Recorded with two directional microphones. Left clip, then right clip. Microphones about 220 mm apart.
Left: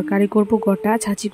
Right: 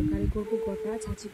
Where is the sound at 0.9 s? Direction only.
40° left (ahead or behind).